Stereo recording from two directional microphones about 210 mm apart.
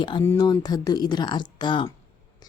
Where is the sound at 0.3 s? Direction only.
20° left (ahead or behind).